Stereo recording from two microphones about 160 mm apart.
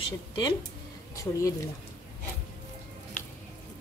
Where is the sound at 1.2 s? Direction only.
20° left (ahead or behind).